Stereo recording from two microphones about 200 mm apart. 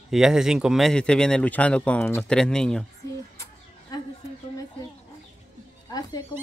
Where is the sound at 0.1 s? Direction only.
Centre (ahead or behind).